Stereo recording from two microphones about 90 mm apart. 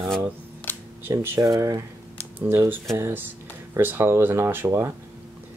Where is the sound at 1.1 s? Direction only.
35° right (ahead or behind).